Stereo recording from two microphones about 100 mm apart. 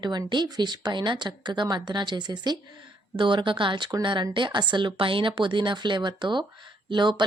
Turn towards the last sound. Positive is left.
turn(degrees=-50)  # may be behind; listen again after turning